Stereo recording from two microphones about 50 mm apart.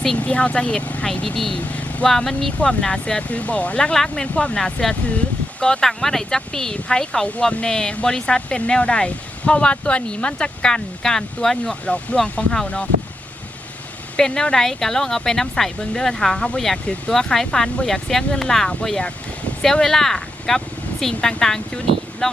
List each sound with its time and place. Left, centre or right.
0.2 s speech: left
1.0 s speech: centre
1.5 s vehicle: left
2.0 s speech: centre; by 3.9 s left
3.9 s speech: centre
5.9 s speech: centre
14.2 s speech: centre
19.7 s speech: centre